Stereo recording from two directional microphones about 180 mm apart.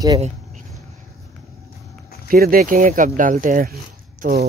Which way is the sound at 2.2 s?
55° right (ahead or behind).